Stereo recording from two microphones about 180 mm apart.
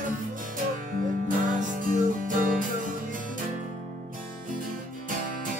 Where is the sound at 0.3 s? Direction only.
45° right (ahead or behind).